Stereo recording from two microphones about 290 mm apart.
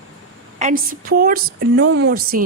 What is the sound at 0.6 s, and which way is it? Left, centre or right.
A woman's voice, right.